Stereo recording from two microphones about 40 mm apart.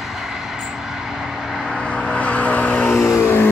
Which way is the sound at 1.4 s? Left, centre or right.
Centre.